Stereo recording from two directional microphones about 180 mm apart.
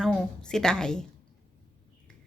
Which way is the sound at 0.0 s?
5° left (ahead or behind).